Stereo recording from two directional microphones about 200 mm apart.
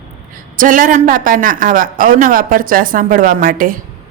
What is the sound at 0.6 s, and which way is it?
A woman's voice, 40° right (ahead or behind).